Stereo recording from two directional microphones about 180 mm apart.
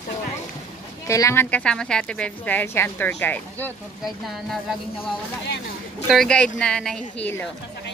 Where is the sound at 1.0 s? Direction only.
15° left (ahead or behind).